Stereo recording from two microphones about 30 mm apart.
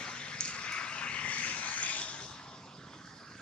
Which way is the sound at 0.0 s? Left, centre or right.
Left.